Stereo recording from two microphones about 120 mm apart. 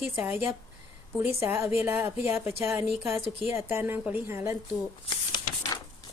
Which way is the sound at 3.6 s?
20° right (ahead or behind).